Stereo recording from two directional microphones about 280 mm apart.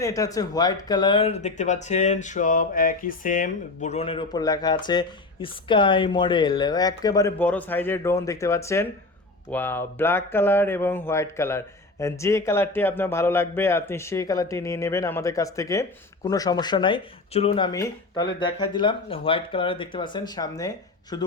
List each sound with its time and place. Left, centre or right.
0.0 s speech: centre